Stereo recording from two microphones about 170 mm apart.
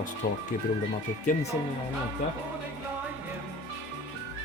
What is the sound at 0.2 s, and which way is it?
Speech, 55° left (ahead or behind).